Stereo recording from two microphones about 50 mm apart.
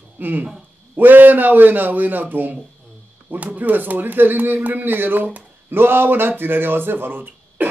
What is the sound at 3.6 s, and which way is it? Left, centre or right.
Speech, right.